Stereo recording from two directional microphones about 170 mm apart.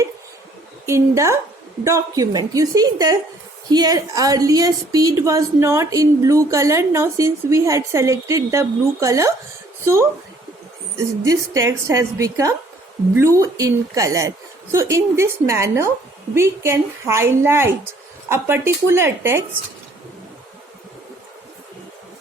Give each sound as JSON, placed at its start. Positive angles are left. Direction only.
{"t": 0.9, "sound": "a woman's voice", "side_deg": -15}